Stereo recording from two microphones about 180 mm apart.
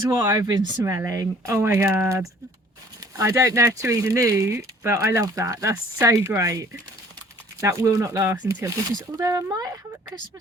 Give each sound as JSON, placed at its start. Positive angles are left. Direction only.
{"t": 0.0, "sound": "speech", "side_deg": -20}